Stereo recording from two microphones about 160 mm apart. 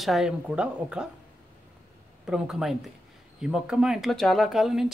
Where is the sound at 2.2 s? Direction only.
5° right (ahead or behind).